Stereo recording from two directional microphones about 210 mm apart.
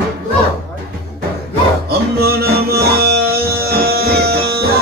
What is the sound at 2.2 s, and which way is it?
Music, 50° right (ahead or behind).